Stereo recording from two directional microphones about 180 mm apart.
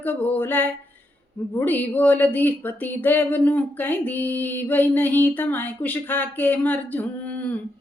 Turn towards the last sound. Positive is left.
turn(degrees=10)  # may be behind; listen again after turning